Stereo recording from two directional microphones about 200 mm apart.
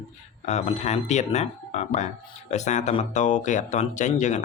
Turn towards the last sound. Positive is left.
turn(degrees=35)  # may be behind; listen again after turning